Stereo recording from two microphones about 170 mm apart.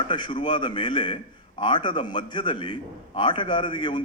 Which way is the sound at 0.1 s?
30° left (ahead or behind).